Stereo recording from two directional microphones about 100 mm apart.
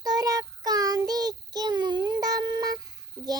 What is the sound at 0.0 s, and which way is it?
Child singing, 40° right (ahead or behind).